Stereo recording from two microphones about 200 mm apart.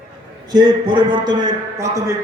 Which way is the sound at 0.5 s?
20° right (ahead or behind).